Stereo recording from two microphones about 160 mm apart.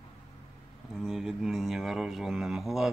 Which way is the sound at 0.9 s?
Centre (ahead or behind).